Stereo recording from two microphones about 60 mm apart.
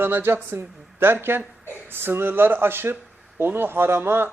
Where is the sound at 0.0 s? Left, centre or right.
Right.